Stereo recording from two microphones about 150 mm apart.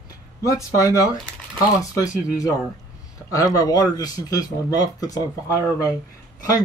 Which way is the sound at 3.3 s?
25° left (ahead or behind).